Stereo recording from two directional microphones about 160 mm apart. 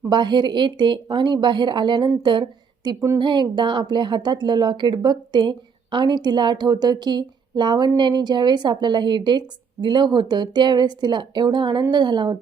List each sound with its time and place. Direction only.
0.1 s speech: 30° right (ahead or behind)